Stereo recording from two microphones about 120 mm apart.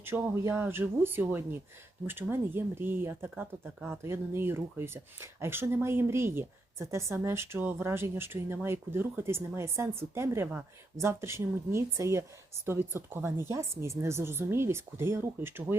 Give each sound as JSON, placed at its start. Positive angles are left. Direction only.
{"t": 0.0, "sound": "a woman's voice", "side_deg": -20}